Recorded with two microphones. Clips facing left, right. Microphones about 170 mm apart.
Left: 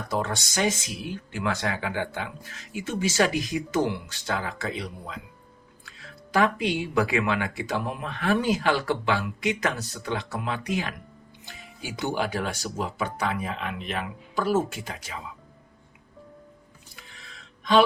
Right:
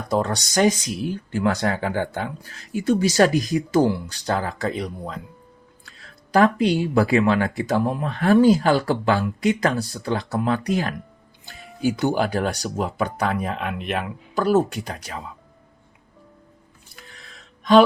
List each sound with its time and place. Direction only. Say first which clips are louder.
0.1 s speech: right 6 dB; 40° right (ahead or behind)
6.3 s speech: right 6 dB; 40° right (ahead or behind); by 14.0 s 60° right (ahead or behind)
14.8 s speech: right 5 dB; 40° right (ahead or behind)
17.6 s gasp: right 6 dB; 45° right (ahead or behind)